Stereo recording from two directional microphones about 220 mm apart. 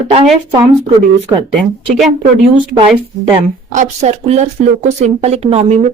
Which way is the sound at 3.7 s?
30° right (ahead or behind).